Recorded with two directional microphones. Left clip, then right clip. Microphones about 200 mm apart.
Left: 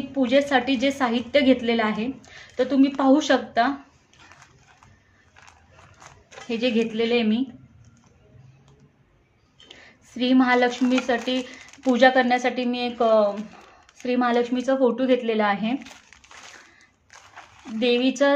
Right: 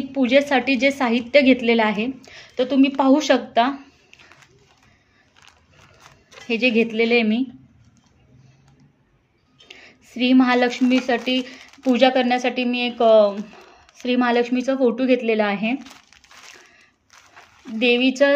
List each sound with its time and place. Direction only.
0.1 s a woman's voice: 40° right (ahead or behind)
6.4 s a woman's voice: 30° right (ahead or behind)
9.7 s a woman's voice: 30° right (ahead or behind)
17.7 s speech: 30° right (ahead or behind)